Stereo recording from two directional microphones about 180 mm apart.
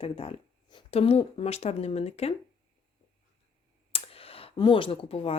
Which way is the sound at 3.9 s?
30° left (ahead or behind).